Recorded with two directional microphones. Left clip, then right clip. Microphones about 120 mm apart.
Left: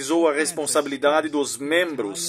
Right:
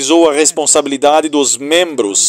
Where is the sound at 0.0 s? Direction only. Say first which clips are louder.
Right 11 dB; 50° right (ahead or behind).